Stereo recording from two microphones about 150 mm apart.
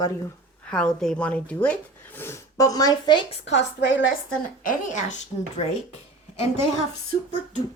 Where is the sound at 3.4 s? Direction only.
45° left (ahead or behind).